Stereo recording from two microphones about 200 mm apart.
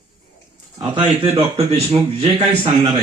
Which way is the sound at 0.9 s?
25° right (ahead or behind).